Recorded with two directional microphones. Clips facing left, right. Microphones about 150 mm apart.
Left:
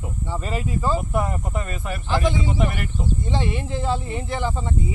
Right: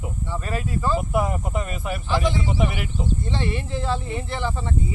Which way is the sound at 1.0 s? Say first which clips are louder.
Right 1 dB; 5° right (ahead or behind).